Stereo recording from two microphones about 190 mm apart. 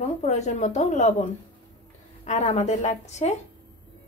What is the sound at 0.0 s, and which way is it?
A woman's voice, 35° left (ahead or behind).